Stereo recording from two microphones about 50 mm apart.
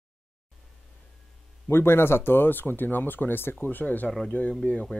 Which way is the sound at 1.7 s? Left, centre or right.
Left.